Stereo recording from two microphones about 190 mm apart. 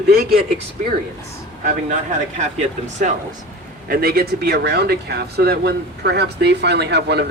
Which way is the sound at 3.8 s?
50° right (ahead or behind).